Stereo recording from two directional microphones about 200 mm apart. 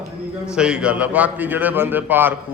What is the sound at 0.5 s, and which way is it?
A man's voice, 5° right (ahead or behind).